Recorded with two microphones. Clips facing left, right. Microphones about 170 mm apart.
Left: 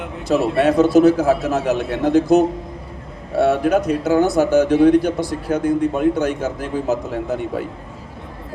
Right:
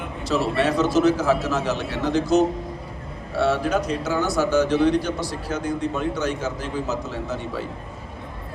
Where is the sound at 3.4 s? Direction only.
55° left (ahead or behind).